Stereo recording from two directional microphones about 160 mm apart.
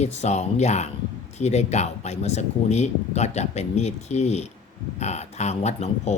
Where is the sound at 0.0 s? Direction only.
45° left (ahead or behind).